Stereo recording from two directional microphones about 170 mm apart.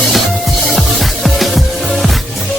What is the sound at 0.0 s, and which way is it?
Music, centre (ahead or behind).